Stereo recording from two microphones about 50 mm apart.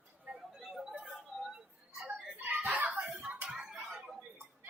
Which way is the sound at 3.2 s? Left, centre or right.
Right.